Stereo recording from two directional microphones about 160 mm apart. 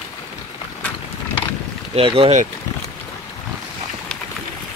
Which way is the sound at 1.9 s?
35° right (ahead or behind).